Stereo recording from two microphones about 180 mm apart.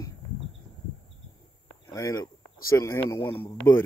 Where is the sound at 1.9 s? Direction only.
20° left (ahead or behind).